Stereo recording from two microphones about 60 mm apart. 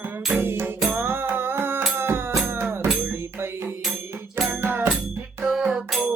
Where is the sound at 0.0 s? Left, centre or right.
Right.